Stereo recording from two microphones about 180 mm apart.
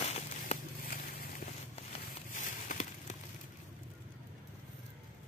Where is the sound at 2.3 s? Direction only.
45° left (ahead or behind).